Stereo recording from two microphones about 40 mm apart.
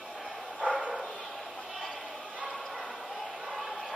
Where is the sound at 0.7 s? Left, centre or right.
Right.